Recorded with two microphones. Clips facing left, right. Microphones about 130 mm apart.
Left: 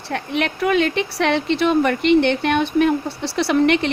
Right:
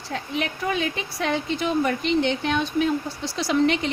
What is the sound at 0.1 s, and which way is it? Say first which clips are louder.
A woman's voice: left 5 dB; 70° left (ahead or behind).